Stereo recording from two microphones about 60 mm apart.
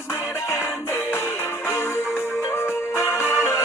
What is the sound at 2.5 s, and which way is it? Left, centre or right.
Music, left.